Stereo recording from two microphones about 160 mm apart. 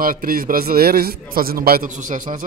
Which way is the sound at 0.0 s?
60° right (ahead or behind).